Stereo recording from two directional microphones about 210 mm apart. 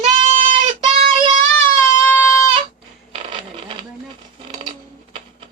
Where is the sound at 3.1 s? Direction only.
25° right (ahead or behind).